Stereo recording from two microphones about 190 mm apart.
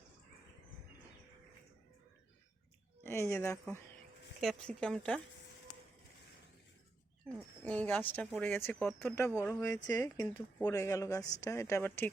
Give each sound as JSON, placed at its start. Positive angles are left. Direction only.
{"t": 3.0, "sound": "speech", "side_deg": 15}
{"t": 4.4, "sound": "speech", "side_deg": 5}
{"t": 7.6, "sound": "speech", "side_deg": 5}